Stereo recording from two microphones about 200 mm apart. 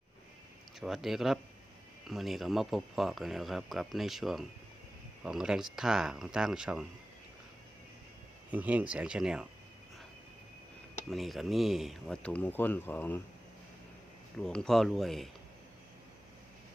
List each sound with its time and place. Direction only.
0.8 s speech: centre (ahead or behind)
8.4 s speech: 5° right (ahead or behind)
11.1 s speech: centre (ahead or behind)
14.3 s speech: 5° left (ahead or behind)